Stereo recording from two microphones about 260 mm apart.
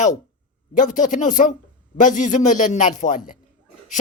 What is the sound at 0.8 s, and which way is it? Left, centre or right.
A man's voice, left.